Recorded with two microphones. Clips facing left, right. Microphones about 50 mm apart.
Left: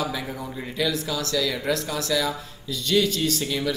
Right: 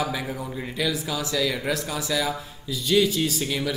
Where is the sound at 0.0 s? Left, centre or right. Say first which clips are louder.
Right 1 dB; centre.